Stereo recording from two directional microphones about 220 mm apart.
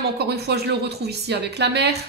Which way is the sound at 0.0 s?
45° right (ahead or behind).